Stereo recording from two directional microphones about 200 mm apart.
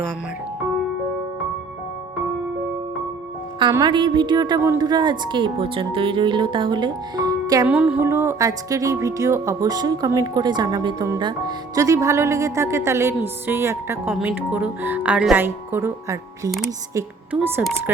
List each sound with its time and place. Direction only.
3.6 s a woman's voice: 20° right (ahead or behind)
7.7 s speech: 5° right (ahead or behind)